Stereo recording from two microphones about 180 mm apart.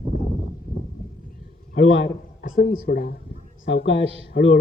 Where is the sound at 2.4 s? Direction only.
50° left (ahead or behind).